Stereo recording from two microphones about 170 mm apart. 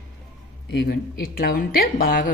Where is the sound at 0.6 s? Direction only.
80° left; by 2.3 s 55° left (ahead or behind).